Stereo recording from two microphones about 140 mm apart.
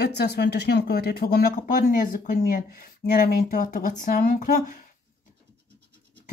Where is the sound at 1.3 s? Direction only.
80° left.